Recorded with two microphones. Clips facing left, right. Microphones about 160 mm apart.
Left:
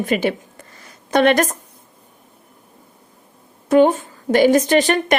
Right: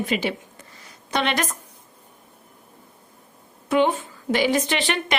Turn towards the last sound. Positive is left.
turn(degrees=45)  # may be behind; listen again after turning